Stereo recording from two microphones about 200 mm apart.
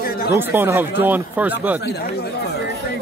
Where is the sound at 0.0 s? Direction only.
50° left (ahead or behind).